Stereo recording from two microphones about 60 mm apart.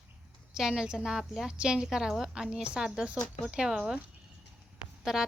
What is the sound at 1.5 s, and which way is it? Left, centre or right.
A woman's voice, centre.